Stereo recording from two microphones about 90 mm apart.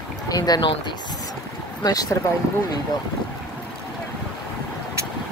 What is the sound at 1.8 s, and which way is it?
Speech, 40° left (ahead or behind).